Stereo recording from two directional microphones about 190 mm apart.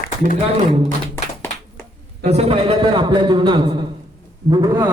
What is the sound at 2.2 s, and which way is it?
A man's voice, 35° right (ahead or behind).